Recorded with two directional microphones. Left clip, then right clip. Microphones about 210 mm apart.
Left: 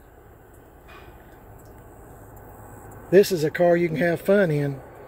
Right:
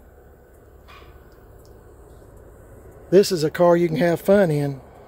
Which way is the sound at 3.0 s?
25° right (ahead or behind).